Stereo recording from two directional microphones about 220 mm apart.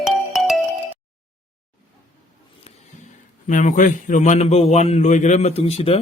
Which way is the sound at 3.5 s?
35° left (ahead or behind).